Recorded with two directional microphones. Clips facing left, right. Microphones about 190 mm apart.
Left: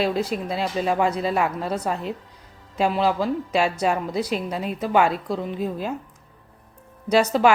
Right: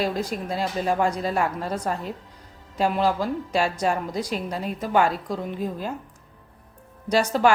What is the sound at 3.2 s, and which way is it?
A woman's voice, 10° left (ahead or behind).